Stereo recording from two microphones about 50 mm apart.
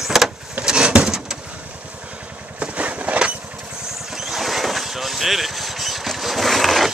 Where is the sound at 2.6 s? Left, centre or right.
Right.